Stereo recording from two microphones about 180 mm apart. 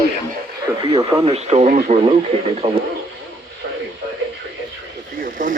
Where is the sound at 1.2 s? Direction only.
35° right (ahead or behind).